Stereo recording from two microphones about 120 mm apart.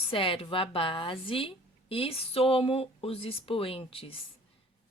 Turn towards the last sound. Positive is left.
turn(degrees=50)  # may be behind; listen again after turning